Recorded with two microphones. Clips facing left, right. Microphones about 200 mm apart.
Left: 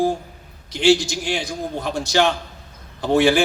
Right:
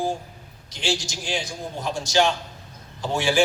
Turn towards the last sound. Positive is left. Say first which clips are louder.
# left 7 dB
turn(degrees=60)  # may be behind; listen again after turning